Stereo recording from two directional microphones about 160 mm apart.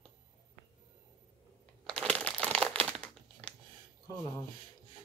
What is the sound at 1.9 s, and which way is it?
Crumpling, 5° left (ahead or behind).